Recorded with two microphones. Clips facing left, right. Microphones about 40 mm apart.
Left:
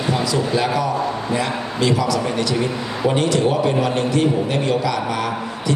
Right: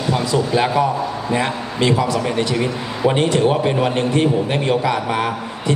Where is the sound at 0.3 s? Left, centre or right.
Right.